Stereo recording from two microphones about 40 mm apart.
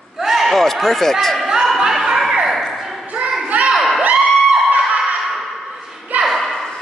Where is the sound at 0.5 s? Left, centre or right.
Centre.